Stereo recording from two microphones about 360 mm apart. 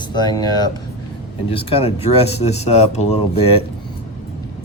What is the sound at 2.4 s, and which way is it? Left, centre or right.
Speech, centre.